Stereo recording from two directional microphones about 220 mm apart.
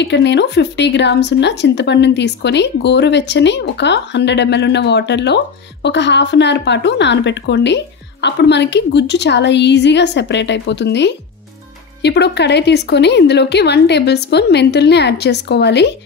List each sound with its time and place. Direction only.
0.0 s speech: 50° left (ahead or behind)